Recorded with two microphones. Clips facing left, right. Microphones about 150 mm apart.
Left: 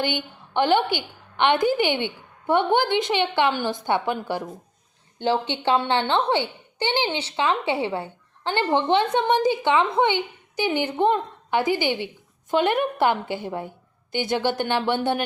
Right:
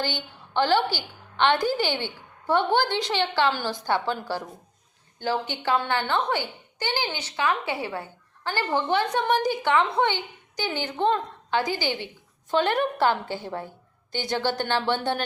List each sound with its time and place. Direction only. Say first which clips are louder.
0.0 s a woman's voice: left 4 dB; 20° left (ahead or behind)